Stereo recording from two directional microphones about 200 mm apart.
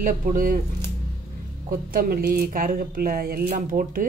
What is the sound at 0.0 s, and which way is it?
Speech, 40° right (ahead or behind).